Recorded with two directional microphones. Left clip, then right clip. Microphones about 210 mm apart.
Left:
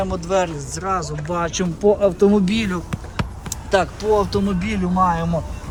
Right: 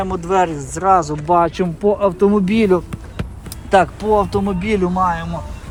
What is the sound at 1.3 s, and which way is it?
Speech, 20° right (ahead or behind).